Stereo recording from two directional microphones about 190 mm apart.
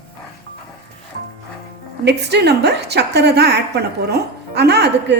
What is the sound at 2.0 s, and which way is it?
A woman's voice, 65° right (ahead or behind).